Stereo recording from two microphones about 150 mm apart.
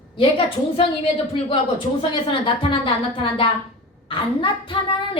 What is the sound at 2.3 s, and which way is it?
A woman's voice, 35° left (ahead or behind).